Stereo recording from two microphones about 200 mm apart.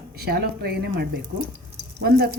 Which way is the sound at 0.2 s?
50° right (ahead or behind).